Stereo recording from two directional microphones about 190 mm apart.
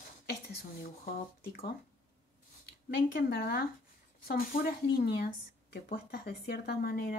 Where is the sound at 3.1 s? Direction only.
55° left (ahead or behind).